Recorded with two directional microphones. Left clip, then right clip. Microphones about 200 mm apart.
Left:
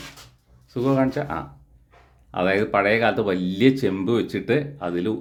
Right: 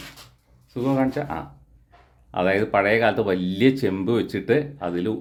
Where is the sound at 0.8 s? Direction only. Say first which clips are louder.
Left 2 dB; 15° left (ahead or behind).